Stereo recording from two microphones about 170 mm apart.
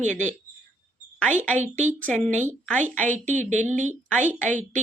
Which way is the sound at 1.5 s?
45° right (ahead or behind).